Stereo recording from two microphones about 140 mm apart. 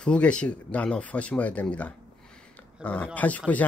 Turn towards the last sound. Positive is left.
turn(degrees=10)  # may be behind; listen again after turning